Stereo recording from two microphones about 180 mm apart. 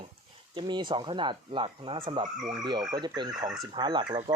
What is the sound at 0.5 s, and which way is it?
Speech, 25° right (ahead or behind).